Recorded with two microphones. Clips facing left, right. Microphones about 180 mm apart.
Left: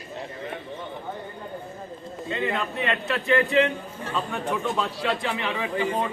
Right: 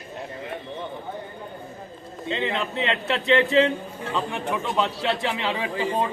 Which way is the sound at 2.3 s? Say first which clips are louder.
Right 1 dB; 25° right (ahead or behind).